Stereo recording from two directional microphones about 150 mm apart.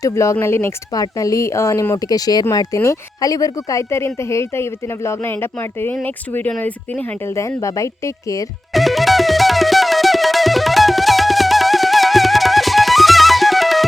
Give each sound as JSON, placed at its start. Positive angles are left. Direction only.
{"t": 0.0, "sound": "speech", "side_deg": 20}
{"t": 8.7, "sound": "music", "side_deg": 0}